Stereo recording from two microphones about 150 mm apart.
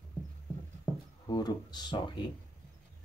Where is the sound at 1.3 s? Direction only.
25° left (ahead or behind).